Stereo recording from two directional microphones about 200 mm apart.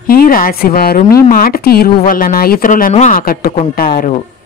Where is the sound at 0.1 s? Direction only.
45° left (ahead or behind).